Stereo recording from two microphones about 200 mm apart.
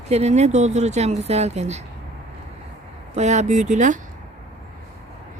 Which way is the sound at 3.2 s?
35° right (ahead or behind).